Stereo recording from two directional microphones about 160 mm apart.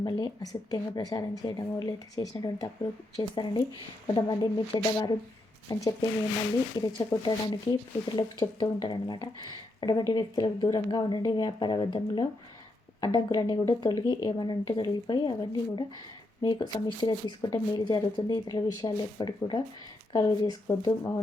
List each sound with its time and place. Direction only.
0.0 s speech: 25° left (ahead or behind)